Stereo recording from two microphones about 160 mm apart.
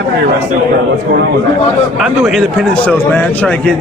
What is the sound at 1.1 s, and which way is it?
Speech, 65° right (ahead or behind).